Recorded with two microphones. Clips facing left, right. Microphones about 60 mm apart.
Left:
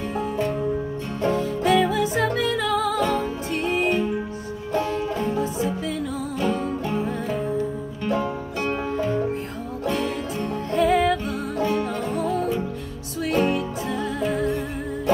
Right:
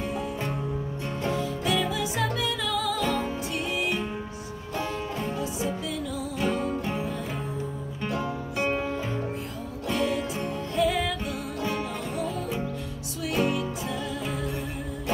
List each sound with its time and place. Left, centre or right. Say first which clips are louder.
1.2 s music: left 7 dB; left
6.4 s music: left 2 dB; centre
9.8 s music: left 1 dB; left